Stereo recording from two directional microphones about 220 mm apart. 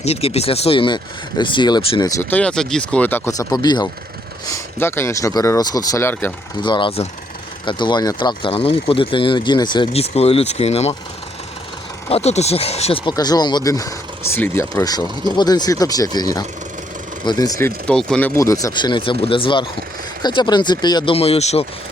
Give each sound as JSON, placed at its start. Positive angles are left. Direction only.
{"t": 0.0, "sound": "speech", "side_deg": 25}
{"t": 6.6, "sound": "speech", "side_deg": 20}
{"t": 12.0, "sound": "speech", "side_deg": 30}
{"t": 17.8, "sound": "speech", "side_deg": 5}